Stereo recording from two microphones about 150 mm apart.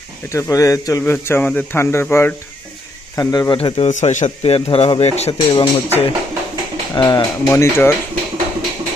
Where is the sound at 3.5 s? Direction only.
35° left (ahead or behind).